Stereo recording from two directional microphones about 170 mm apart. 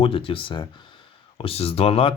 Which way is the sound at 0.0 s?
30° left (ahead or behind).